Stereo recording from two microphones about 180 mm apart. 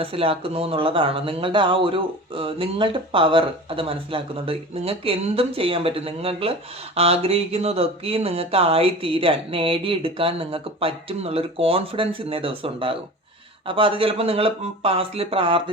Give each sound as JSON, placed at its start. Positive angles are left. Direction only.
{"t": 0.0, "sound": "speech", "side_deg": -30}